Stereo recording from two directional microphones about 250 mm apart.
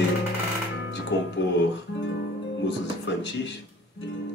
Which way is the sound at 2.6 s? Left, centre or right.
Left.